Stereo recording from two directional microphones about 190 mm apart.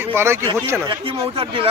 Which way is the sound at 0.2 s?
10° right (ahead or behind).